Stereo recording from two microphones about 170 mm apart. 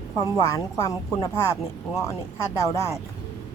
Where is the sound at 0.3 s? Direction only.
20° left (ahead or behind).